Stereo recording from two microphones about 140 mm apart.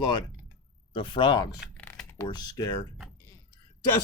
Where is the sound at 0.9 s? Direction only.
35° left (ahead or behind).